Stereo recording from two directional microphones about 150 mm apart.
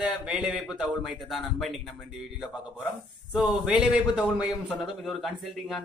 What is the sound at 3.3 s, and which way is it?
A man's voice, 5° right (ahead or behind).